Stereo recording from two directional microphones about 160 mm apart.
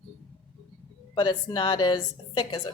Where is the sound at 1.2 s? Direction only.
25° left (ahead or behind).